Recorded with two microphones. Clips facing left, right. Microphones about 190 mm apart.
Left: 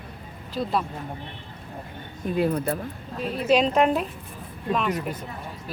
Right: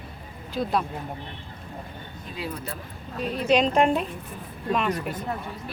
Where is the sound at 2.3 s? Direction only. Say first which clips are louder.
Left 10 dB; 50° left (ahead or behind).